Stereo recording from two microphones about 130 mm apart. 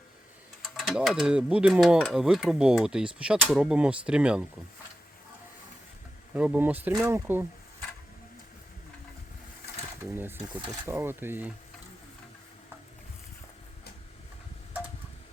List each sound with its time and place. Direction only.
0.8 s speech: centre (ahead or behind)
6.3 s speech: 10° right (ahead or behind)
10.0 s speech: 15° right (ahead or behind)